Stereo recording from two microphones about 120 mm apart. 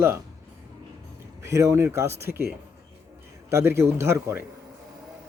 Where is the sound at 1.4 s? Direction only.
25° right (ahead or behind).